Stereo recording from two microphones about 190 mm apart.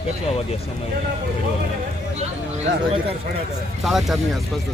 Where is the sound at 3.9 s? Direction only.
Centre (ahead or behind).